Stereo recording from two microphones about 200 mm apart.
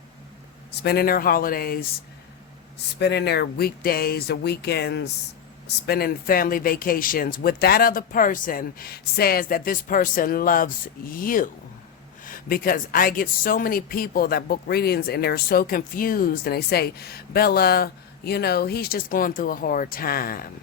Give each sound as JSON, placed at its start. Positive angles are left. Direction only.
{"t": 0.7, "sound": "speech", "side_deg": 55}
{"t": 2.7, "sound": "speech", "side_deg": 55}